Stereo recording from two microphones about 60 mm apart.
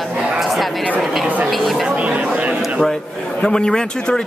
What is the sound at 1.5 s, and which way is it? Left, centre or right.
Speech, centre.